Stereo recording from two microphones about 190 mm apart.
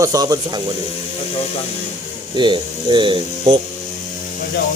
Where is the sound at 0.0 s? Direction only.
20° right (ahead or behind).